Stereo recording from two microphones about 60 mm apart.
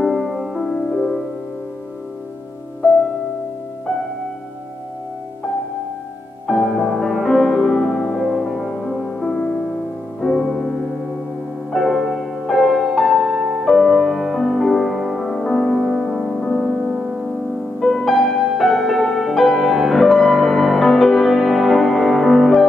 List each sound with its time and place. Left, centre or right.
0.0 s music: centre
0.7 s music: centre
2.8 s music: left
6.4 s music: centre
10.2 s music: centre
16.9 s music: centre